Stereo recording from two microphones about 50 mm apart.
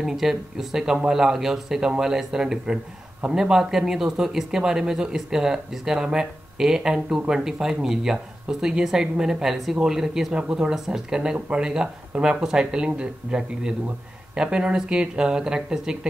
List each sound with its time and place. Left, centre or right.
0.0 s speech: centre